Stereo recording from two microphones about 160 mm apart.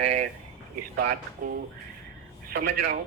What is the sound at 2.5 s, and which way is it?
Speech, 75° right (ahead or behind).